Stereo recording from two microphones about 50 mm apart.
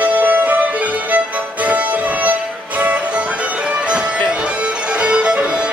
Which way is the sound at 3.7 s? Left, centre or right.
Right.